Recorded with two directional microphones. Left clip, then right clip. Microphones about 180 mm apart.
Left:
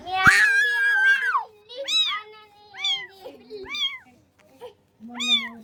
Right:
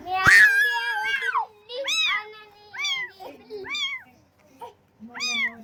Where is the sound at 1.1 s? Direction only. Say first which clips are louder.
Left 3 dB; 45° left (ahead or behind).